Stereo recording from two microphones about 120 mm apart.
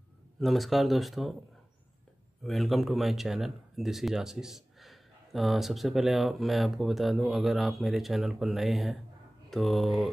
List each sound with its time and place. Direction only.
0.4 s speech: centre (ahead or behind)
2.4 s speech: centre (ahead or behind)